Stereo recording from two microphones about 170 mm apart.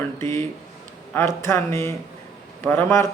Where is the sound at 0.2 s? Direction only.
15° left (ahead or behind).